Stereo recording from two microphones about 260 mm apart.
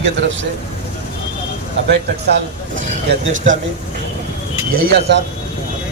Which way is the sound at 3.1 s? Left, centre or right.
Right.